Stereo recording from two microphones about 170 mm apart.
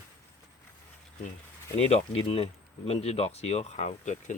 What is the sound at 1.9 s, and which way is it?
Speech, 35° left (ahead or behind).